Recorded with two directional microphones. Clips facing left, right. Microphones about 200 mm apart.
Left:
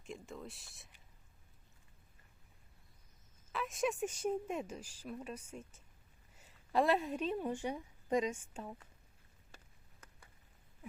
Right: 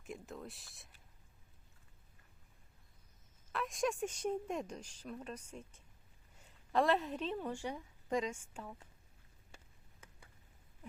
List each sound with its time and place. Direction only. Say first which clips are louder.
0.0 s speech: even; 5° right (ahead or behind)
3.5 s a woman's voice: even; centre (ahead or behind); by 8.7 s 20° left (ahead or behind)